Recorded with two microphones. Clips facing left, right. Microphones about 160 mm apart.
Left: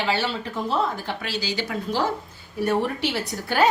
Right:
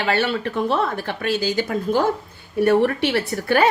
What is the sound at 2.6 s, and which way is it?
A woman's voice, 65° right (ahead or behind).